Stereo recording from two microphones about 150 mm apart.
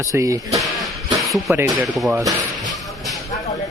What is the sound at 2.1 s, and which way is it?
Speech, 20° right (ahead or behind).